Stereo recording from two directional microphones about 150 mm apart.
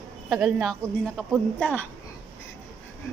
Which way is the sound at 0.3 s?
Centre (ahead or behind).